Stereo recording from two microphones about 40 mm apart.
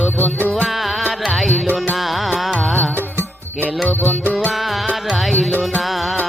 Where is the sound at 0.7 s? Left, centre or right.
Centre.